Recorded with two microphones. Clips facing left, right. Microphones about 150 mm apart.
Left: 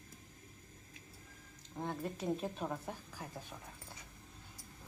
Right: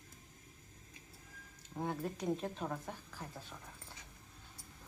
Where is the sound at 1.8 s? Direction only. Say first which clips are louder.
Right 1 dB; 5° right (ahead or behind).